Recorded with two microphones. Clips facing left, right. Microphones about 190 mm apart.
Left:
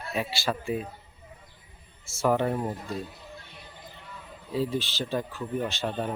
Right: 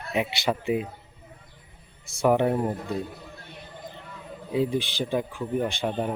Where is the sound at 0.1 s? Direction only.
20° right (ahead or behind).